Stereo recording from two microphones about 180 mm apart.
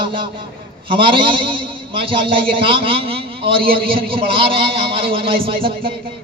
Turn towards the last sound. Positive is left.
turn(degrees=-30)  # may be behind; listen again after turning